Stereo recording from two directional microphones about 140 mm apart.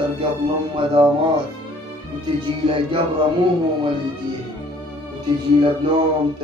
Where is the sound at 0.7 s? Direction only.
35° right (ahead or behind).